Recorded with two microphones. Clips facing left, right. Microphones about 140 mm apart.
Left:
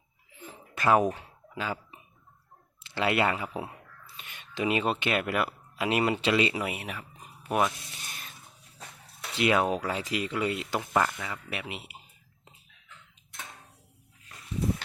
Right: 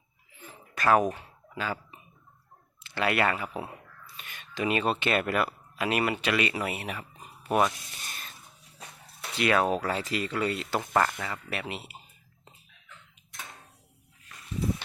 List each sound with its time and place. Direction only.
0.7 s speech: 15° left (ahead or behind)
6.6 s speech: 10° left (ahead or behind)
7.4 s a sound: centre (ahead or behind)
9.4 s speech: 15° left (ahead or behind)